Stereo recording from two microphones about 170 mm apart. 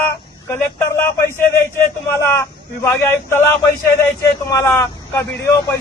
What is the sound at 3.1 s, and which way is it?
Speech, 15° left (ahead or behind).